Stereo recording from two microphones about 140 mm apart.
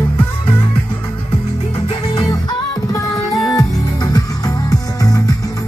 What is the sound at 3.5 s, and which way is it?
Music, 30° left (ahead or behind).